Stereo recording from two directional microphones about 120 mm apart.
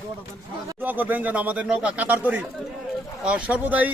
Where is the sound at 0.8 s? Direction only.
15° right (ahead or behind).